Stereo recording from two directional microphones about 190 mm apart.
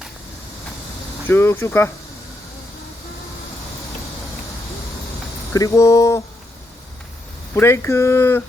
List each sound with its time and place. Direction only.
1.3 s speech: 15° left (ahead or behind)
5.5 s speech: 15° left (ahead or behind)
7.5 s speech: 10° left (ahead or behind)